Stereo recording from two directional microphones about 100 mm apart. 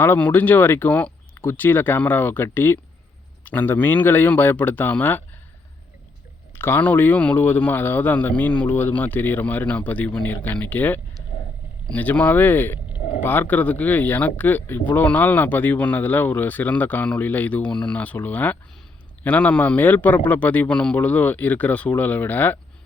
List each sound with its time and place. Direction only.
0.0 s a man's voice: 20° left (ahead or behind)
6.6 s speech: 20° left (ahead or behind)